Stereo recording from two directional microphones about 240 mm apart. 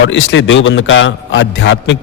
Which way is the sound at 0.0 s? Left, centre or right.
Left.